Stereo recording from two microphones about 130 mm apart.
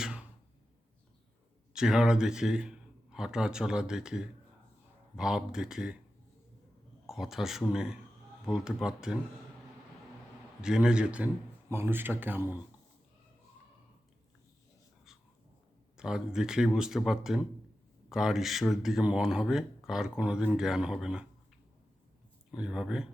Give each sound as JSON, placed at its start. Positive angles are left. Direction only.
{"t": 0.0, "sound": "a sound", "side_deg": -5}
{"t": 1.7, "sound": "speech", "side_deg": -5}
{"t": 7.1, "sound": "speech", "side_deg": -5}
{"t": 10.6, "sound": "speech", "side_deg": -5}
{"t": 16.0, "sound": "speech", "side_deg": -5}
{"t": 22.5, "sound": "speech", "side_deg": -5}